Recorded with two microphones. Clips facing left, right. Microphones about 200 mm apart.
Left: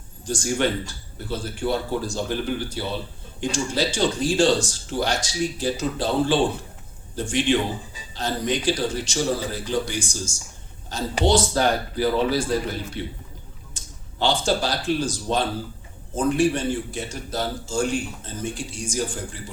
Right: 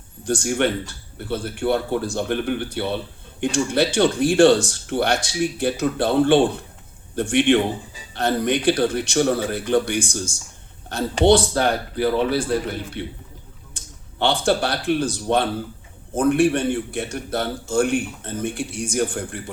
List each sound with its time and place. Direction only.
0.3 s a man's voice: 60° right (ahead or behind)